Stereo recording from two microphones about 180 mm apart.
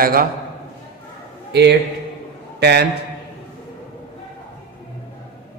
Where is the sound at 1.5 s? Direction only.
65° right (ahead or behind).